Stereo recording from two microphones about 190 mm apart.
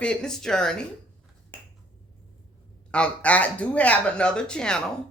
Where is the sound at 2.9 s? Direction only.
5° left (ahead or behind).